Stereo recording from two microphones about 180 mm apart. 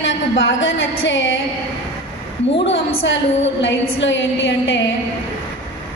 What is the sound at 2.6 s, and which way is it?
A woman's voice, 85° left.